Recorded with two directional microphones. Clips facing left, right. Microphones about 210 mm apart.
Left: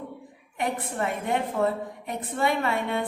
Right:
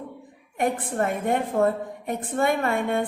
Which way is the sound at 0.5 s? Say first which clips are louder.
Right 4 dB; 50° right (ahead or behind).